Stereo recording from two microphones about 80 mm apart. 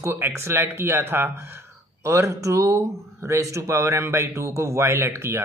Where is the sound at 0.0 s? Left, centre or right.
Right.